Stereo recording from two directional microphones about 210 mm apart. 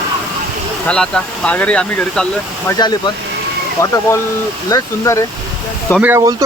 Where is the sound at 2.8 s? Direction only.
20° left (ahead or behind).